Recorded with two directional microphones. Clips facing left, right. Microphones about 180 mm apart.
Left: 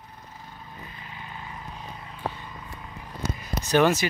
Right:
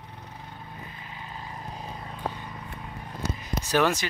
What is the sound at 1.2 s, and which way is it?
Vehicle, 35° right (ahead or behind).